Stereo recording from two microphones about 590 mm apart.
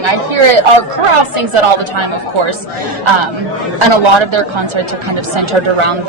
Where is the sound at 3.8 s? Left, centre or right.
Right.